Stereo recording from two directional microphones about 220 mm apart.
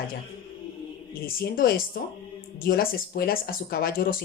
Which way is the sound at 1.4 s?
40° left (ahead or behind).